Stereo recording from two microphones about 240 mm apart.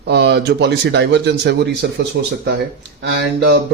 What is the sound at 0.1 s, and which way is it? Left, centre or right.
A man's voice, right.